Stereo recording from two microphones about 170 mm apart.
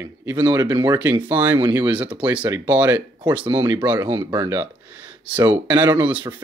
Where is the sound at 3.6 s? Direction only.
15° right (ahead or behind).